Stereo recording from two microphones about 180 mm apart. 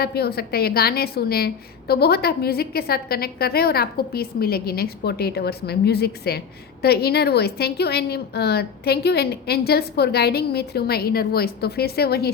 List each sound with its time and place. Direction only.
0.0 s a woman's voice: 60° left (ahead or behind)